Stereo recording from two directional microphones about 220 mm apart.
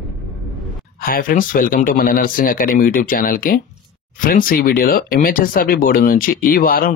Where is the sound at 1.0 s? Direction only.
40° left (ahead or behind).